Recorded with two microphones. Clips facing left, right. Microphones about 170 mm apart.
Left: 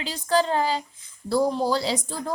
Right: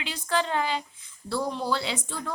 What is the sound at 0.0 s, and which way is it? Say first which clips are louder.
Speech: left 5 dB; 35° left (ahead or behind).